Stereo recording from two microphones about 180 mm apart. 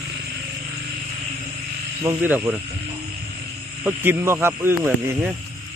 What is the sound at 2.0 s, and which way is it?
Speech, 10° right (ahead or behind).